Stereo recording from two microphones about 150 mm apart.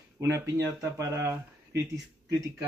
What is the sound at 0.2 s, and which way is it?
A man's voice, 20° right (ahead or behind).